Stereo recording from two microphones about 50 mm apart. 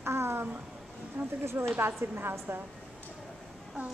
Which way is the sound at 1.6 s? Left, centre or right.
Right.